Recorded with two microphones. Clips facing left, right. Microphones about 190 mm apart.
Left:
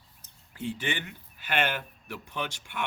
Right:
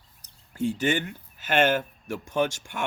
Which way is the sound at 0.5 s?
45° right (ahead or behind).